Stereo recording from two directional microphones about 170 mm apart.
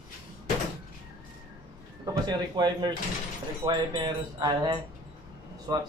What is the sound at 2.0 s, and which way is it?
Speech, 25° right (ahead or behind).